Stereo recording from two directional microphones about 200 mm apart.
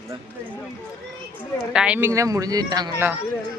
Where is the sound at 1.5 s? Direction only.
5° right (ahead or behind); by 3.1 s 20° right (ahead or behind).